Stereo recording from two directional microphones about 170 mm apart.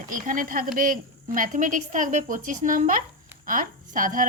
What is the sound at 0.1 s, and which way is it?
A woman's voice, 50° right (ahead or behind).